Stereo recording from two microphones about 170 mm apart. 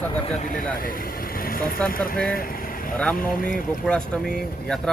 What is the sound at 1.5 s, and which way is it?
Vehicle, 55° left (ahead or behind).